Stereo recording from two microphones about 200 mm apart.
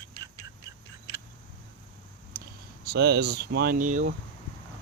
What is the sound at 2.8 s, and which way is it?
Speech, 55° right (ahead or behind).